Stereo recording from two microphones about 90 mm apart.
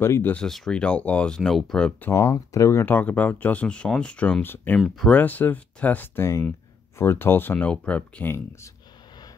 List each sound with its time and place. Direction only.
0.0 s speech: 25° left (ahead or behind)
0.5 s speech: 5° left (ahead or behind)
1.9 s speech: 25° left (ahead or behind)
2.8 s speech: 20° left (ahead or behind)
4.7 s speech: centre (ahead or behind)
5.1 s speech: 20° left (ahead or behind)